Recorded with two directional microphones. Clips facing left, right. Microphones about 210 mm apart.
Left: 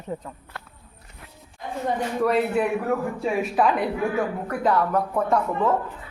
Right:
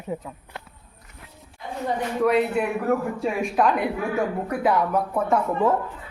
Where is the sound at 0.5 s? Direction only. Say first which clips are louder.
Right 1 dB; 20° right (ahead or behind).